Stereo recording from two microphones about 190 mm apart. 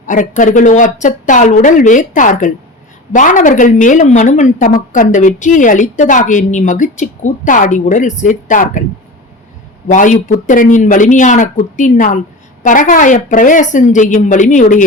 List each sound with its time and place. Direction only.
0.0 s a woman's voice: 45° left (ahead or behind)
9.9 s speech: 40° left (ahead or behind)